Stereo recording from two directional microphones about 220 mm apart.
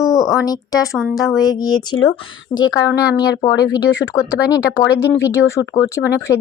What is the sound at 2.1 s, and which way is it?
A woman's voice, 20° left (ahead or behind).